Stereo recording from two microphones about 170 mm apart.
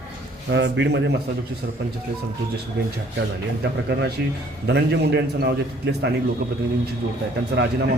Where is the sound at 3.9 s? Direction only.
75° right (ahead or behind).